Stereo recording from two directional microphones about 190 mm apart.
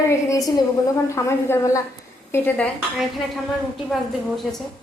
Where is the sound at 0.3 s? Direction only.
20° left (ahead or behind).